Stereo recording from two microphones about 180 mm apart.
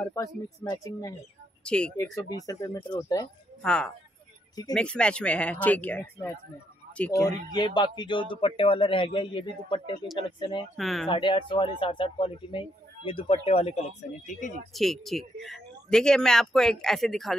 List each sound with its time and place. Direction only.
0.0 s speech: 20° left (ahead or behind)
1.6 s speech: 5° left (ahead or behind)
2.0 s speech: 20° left (ahead or behind)
3.6 s speech: 5° left (ahead or behind); by 10.7 s 25° left (ahead or behind)
10.8 s speech: centre (ahead or behind)
11.1 s speech: 25° left (ahead or behind)
14.7 s speech: centre (ahead or behind)